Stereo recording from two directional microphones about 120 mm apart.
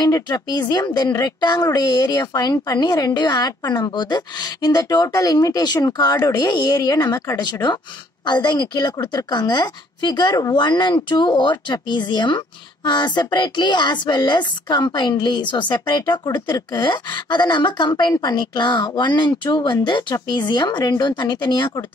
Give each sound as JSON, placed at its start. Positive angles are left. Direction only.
{"t": 0.0, "sound": "speech", "side_deg": 35}
{"t": 7.4, "sound": "speech", "side_deg": 35}